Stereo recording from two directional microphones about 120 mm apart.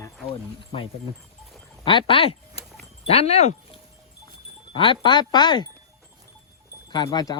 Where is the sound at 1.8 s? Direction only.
45° left (ahead or behind); by 3.8 s 60° left (ahead or behind).